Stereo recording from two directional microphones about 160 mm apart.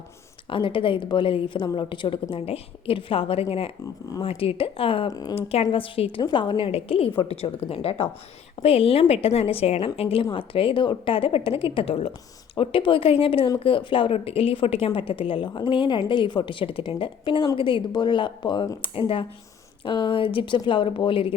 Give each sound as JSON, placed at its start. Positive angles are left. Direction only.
{"t": 0.5, "sound": "a woman's voice", "side_deg": 35}